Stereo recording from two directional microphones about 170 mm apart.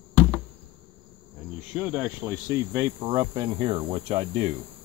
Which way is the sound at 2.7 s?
25° right (ahead or behind).